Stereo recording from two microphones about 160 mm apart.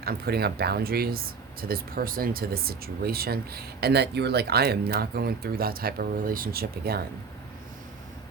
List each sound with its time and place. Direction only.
0.0 s speech: 75° right (ahead or behind)